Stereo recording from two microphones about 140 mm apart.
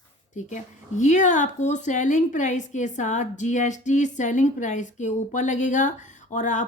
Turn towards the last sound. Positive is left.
turn(degrees=60)  # may be behind; listen again after turning